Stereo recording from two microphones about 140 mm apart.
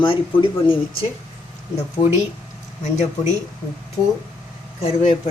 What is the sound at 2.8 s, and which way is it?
Speech, 55° left (ahead or behind).